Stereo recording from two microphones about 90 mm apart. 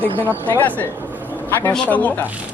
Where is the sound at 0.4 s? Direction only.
20° left (ahead or behind).